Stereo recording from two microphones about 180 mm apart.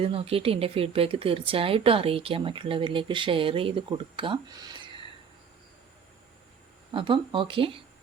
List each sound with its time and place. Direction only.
0.0 s speech: 30° right (ahead or behind)
6.9 s speech: 25° right (ahead or behind)